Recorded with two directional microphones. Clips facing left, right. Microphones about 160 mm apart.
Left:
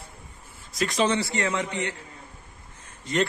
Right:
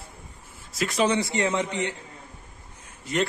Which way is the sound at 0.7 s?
10° right (ahead or behind).